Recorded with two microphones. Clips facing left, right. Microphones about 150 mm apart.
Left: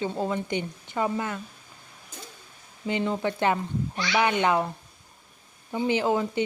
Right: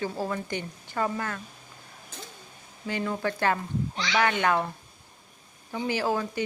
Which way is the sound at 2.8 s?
20° left (ahead or behind).